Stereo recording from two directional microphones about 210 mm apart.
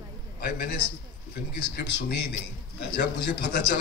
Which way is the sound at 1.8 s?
55° left (ahead or behind).